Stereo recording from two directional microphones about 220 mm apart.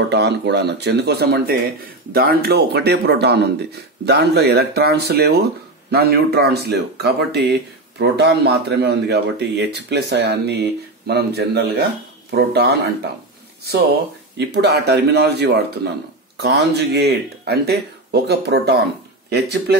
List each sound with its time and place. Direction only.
0.1 s speech: 50° right (ahead or behind)
14.3 s speech: 50° right (ahead or behind)